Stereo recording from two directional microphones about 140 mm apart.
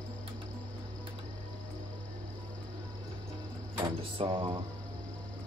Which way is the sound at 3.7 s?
35° right (ahead or behind).